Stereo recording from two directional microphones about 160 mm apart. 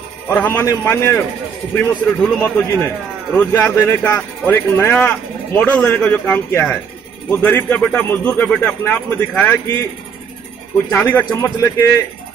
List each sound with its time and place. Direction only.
0.3 s a man's voice: 15° left (ahead or behind)
10.9 s a man's voice: 10° left (ahead or behind)